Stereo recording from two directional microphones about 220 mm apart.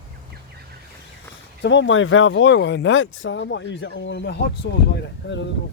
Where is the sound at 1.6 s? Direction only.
55° left (ahead or behind).